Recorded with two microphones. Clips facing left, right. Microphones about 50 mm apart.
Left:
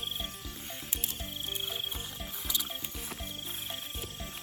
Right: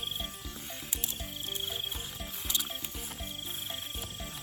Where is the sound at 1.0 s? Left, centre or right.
Left.